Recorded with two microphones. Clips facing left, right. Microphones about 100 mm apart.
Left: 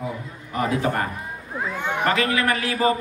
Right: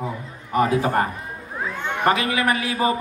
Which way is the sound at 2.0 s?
20° right (ahead or behind).